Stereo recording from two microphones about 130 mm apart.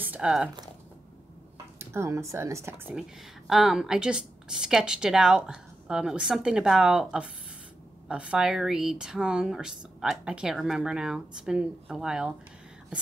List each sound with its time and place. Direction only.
0.0 s speech: 10° right (ahead or behind)
1.8 s speech: 20° right (ahead or behind)
2.9 s a woman's voice: 5° right (ahead or behind)